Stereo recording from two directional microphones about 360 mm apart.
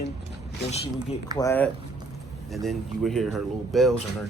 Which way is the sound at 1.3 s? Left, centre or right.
Centre.